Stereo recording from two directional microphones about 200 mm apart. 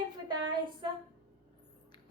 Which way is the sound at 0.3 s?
25° right (ahead or behind).